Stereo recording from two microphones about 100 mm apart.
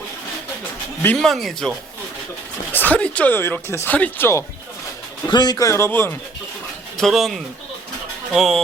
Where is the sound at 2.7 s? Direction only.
15° left (ahead or behind).